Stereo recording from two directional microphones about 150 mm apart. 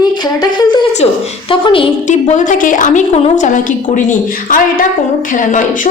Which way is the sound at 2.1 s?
55° left (ahead or behind).